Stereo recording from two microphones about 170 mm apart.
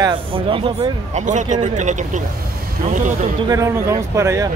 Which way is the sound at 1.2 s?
45° right (ahead or behind).